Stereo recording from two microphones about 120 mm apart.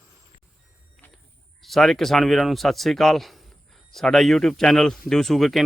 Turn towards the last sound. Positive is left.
turn(degrees=0)  # may be behind; listen again after turning